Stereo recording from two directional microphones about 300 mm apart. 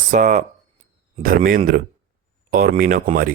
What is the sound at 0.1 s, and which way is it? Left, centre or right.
Speech, right.